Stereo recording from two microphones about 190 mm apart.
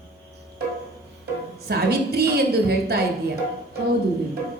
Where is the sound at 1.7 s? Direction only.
55° right (ahead or behind).